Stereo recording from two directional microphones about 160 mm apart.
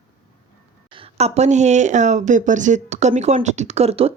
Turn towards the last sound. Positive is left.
turn(degrees=-40)  # may be behind; listen again after turning